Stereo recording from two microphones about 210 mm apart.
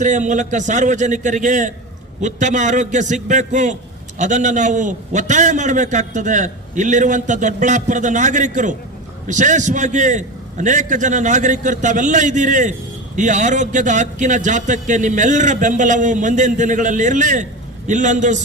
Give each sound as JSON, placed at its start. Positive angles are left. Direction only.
{"t": 0.0, "sound": "a man's voice", "side_deg": -35}